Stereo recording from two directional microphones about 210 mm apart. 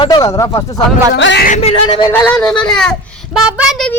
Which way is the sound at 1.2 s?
60° left (ahead or behind).